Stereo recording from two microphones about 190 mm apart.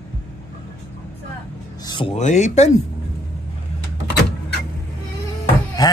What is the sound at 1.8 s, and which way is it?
Speech, 25° left (ahead or behind).